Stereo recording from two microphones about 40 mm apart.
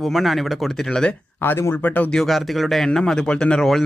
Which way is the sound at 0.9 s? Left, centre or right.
Left.